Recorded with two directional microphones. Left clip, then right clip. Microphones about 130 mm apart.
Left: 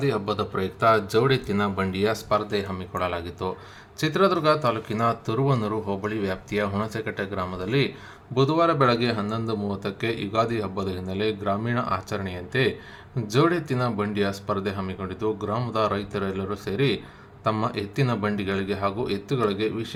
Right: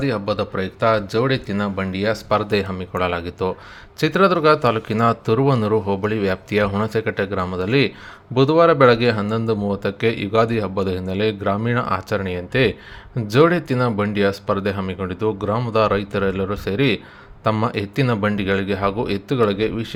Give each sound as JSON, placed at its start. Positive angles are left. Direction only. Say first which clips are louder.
{"t": 0.0, "sound": "speech", "louder": "right 4 dB", "side_deg": -35}
{"t": 2.3, "sound": "speech", "louder": "right 5 dB", "side_deg": -65}
{"t": 2.6, "sound": "a man's voice", "louder": "right 6 dB", "side_deg": -50}